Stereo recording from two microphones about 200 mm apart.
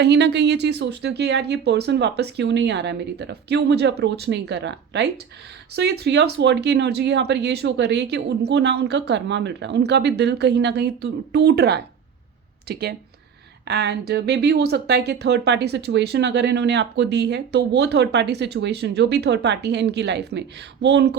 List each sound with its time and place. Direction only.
0.0 s speech: 60° right (ahead or behind)